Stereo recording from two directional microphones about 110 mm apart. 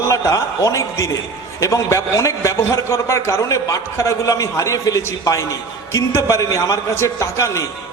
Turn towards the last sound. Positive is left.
turn(degrees=30)  # may be behind; listen again after turning